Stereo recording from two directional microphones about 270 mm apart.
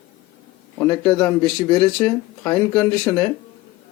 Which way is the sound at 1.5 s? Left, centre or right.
Centre.